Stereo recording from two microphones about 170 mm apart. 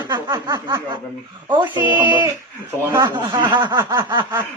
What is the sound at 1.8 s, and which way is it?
Speech, 10° right (ahead or behind).